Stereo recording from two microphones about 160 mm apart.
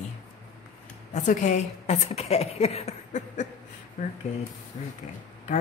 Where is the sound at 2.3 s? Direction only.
40° left (ahead or behind).